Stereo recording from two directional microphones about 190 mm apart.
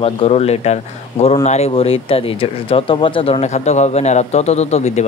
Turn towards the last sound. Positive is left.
turn(degrees=35)  # may be behind; listen again after turning